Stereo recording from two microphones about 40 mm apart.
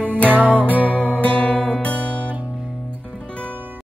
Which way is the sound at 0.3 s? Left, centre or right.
Right.